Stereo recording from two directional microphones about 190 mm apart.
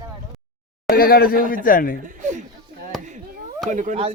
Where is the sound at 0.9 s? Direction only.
50° left (ahead or behind).